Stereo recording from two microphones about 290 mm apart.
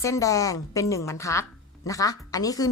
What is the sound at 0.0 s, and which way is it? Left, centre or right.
A woman's voice, centre.